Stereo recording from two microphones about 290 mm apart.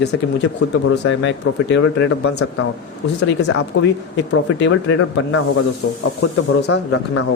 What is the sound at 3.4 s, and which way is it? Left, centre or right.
Speech, left.